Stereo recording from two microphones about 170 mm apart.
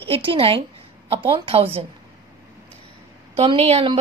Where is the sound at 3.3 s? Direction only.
35° right (ahead or behind).